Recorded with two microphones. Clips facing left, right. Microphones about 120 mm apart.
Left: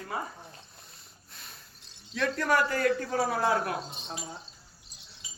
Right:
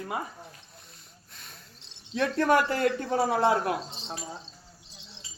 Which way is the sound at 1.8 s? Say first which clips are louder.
Right 3 dB; 25° right (ahead or behind).